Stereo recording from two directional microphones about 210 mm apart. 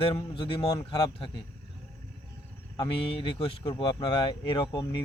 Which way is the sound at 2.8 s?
25° left (ahead or behind).